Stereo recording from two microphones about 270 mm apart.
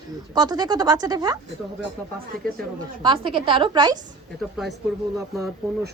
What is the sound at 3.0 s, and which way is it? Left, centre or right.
A woman's voice, centre.